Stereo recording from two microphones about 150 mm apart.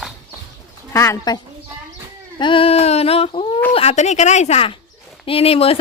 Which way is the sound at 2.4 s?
35° left (ahead or behind).